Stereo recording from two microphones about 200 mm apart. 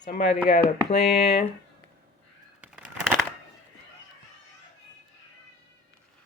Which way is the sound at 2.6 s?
5° right (ahead or behind).